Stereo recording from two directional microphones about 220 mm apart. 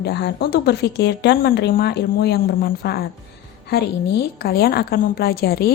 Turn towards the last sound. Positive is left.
turn(degrees=45)  # may be behind; listen again after turning